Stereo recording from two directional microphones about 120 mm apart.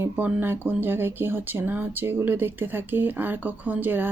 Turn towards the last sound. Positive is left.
turn(degrees=-15)  # may be behind; listen again after turning